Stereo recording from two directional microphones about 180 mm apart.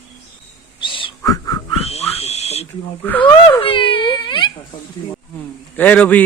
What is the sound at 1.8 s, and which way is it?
Pig, 35° left (ahead or behind).